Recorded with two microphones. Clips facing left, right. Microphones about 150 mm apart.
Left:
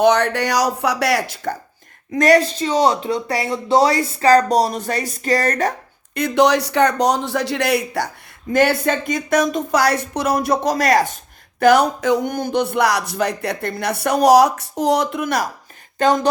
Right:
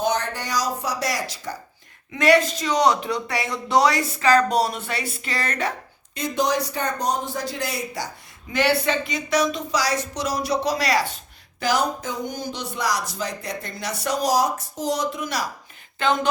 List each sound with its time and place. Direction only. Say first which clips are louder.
0.0 s speech: left 9 dB; 70° left (ahead or behind)
2.1 s speech: left 4 dB; 40° left (ahead or behind)
6.1 s speech: left 7 dB; 65° left (ahead or behind); by 11.2 s 45° left (ahead or behind)
11.6 s speech: left 9 dB; 65° left (ahead or behind)
16.0 s speech: left 6 dB; 40° left (ahead or behind)